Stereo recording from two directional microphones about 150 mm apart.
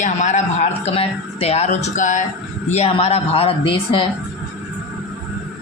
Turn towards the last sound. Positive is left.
turn(degrees=35)  # may be behind; listen again after turning